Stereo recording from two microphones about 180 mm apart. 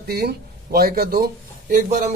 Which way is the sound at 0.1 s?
60° right (ahead or behind).